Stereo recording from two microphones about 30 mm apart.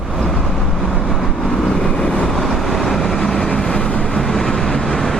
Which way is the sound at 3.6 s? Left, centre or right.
Left.